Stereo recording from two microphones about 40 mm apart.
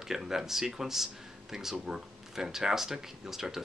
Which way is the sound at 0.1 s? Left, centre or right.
Centre.